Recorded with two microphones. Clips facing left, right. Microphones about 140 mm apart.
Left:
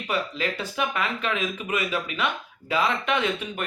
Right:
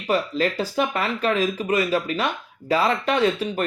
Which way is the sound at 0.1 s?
40° right (ahead or behind).